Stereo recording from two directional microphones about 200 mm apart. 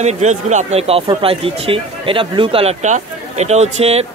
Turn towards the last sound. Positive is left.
turn(degrees=-30)  # may be behind; listen again after turning